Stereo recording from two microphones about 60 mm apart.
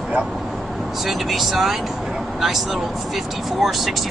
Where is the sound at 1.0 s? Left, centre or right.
Centre.